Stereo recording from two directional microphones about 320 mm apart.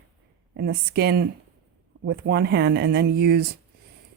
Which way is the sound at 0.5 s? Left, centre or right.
Right.